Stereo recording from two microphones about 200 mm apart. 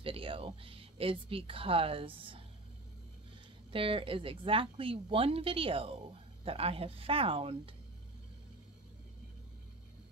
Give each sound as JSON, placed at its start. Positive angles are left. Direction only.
{"t": 0.0, "sound": "speech", "side_deg": -25}
{"t": 3.7, "sound": "a woman's voice", "side_deg": -25}